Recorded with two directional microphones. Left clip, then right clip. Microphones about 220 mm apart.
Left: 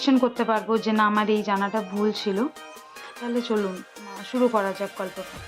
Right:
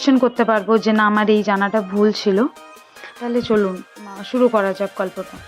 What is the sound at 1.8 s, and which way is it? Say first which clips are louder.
Speech: right 9 dB; centre (ahead or behind).